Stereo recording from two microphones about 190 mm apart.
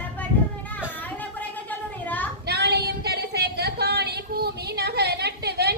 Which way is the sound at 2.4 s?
60° right (ahead or behind).